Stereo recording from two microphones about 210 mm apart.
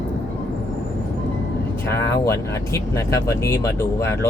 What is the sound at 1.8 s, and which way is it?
Speech, 15° left (ahead or behind).